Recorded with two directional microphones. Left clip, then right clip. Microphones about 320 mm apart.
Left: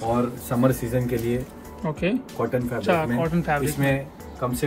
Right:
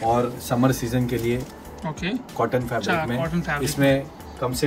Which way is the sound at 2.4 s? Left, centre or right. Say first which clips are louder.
Right 3 dB; centre.